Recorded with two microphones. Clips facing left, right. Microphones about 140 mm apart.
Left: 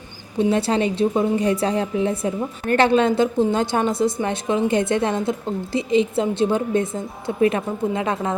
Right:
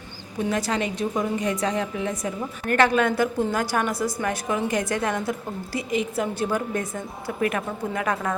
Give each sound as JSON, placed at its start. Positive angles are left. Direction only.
{"t": 0.3, "sound": "a woman's voice", "side_deg": 30}